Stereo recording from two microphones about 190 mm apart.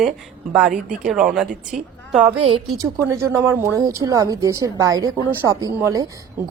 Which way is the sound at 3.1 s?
15° right (ahead or behind).